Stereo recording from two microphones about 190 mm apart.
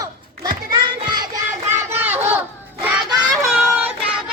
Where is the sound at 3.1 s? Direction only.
20° right (ahead or behind).